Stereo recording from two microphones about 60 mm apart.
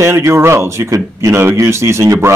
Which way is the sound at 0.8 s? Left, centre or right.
Right.